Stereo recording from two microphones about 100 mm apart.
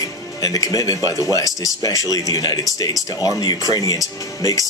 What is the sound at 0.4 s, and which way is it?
Speech, 40° left (ahead or behind).